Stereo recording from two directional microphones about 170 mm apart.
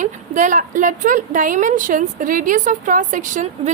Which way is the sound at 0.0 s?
50° right (ahead or behind).